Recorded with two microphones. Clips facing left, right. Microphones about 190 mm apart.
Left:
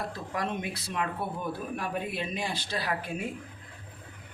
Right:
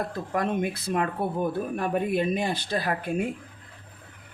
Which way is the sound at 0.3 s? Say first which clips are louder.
Right 7 dB; 50° right (ahead or behind).